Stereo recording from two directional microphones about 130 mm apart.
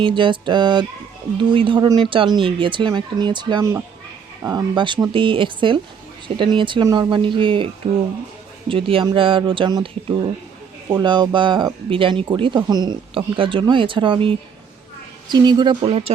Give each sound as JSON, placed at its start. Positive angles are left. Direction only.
{"t": 0.0, "sound": "speech", "side_deg": -40}
{"t": 3.6, "sound": "speech", "side_deg": -20}
{"t": 4.4, "sound": "speech", "side_deg": -35}
{"t": 8.7, "sound": "speech", "side_deg": -45}